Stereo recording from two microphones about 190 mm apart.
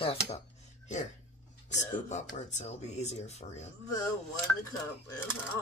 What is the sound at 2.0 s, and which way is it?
Speech, 35° left (ahead or behind).